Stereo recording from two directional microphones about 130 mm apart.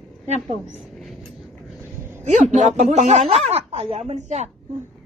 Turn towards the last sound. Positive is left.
turn(degrees=-60)  # may be behind; listen again after turning